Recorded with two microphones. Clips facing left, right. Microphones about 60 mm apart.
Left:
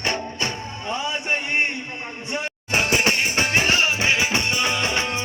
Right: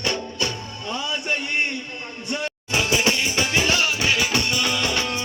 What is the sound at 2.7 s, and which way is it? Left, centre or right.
Music, left.